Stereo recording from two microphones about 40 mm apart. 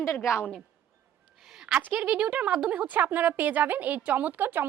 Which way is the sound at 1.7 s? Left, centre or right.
Right.